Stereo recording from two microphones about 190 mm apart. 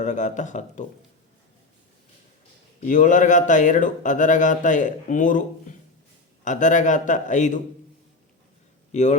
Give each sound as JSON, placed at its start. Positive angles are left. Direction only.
{"t": 0.0, "sound": "speech", "side_deg": 40}
{"t": 2.8, "sound": "speech", "side_deg": 40}
{"t": 8.9, "sound": "speech", "side_deg": 40}